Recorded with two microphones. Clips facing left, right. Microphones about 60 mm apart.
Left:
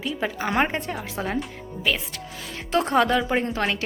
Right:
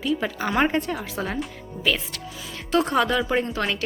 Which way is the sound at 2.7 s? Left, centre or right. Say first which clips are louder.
Left 1 dB; left.